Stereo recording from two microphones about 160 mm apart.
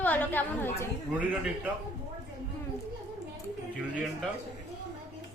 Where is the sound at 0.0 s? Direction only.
10° left (ahead or behind).